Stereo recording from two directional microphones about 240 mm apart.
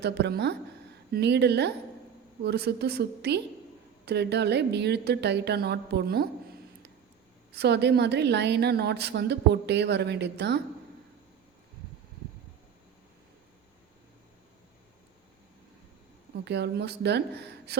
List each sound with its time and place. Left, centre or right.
0.0 s a woman's voice: right
7.5 s a woman's voice: right
16.4 s a woman's voice: right